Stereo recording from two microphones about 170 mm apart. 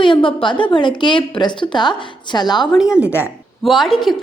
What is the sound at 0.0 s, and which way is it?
A woman's voice, 30° left (ahead or behind).